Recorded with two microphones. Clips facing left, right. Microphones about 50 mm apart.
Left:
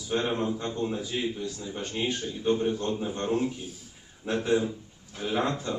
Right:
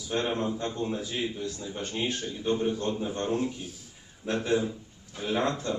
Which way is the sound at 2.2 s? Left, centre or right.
Centre.